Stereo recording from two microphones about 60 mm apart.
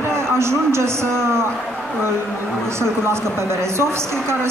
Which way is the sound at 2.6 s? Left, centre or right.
Right.